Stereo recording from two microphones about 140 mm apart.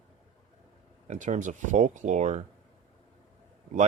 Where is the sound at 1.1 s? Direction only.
60° right (ahead or behind).